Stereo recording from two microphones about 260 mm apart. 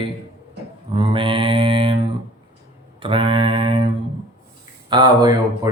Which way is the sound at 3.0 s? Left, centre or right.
Centre.